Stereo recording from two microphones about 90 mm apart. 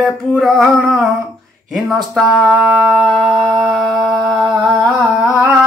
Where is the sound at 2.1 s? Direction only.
Centre (ahead or behind).